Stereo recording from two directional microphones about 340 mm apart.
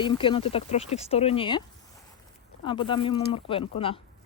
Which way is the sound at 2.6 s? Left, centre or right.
Centre.